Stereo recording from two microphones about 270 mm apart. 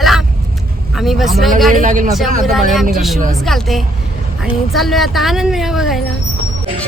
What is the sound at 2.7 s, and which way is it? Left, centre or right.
Speech, centre.